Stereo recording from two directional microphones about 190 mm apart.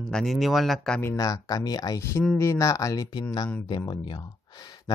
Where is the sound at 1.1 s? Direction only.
20° left (ahead or behind).